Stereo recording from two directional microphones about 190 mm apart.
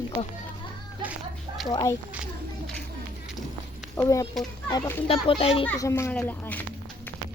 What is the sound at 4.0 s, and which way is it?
Speech, 15° left (ahead or behind).